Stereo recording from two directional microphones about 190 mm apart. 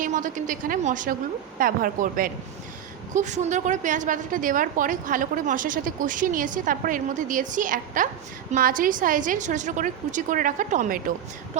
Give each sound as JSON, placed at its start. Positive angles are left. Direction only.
{"t": 0.0, "sound": "a woman's voice", "side_deg": -40}